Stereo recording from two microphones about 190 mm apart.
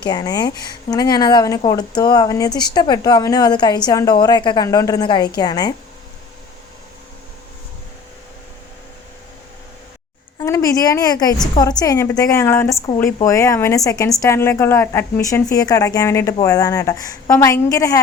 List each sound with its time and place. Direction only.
0.0 s speech: 20° left (ahead or behind)
10.4 s a woman's voice: 20° left (ahead or behind)